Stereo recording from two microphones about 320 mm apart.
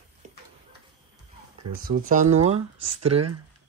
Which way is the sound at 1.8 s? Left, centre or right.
Right.